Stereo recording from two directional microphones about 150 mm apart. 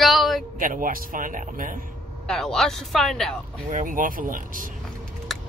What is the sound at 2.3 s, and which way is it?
Speech, 5° left (ahead or behind).